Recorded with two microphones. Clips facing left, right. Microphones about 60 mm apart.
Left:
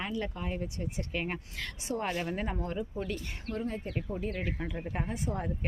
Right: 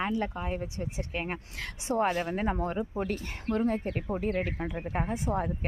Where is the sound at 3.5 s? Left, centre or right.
Right.